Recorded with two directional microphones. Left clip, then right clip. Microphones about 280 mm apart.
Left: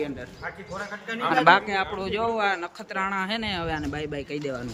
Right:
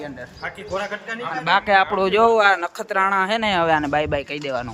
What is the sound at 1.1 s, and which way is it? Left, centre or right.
Speech, right.